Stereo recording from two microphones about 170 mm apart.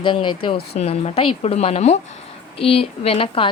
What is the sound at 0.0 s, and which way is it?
Speech, 30° left (ahead or behind).